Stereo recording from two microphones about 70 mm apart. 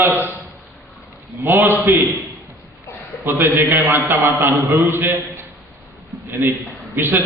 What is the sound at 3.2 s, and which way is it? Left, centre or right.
A man's voice, right.